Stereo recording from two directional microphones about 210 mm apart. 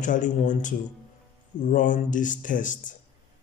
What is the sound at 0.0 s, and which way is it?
Speech, 35° left (ahead or behind).